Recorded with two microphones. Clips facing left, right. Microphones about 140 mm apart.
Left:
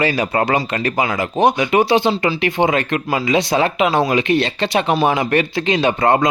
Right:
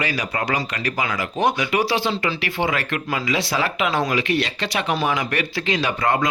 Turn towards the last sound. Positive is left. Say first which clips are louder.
# left 6 dB
turn(degrees=25)  # may be behind; listen again after turning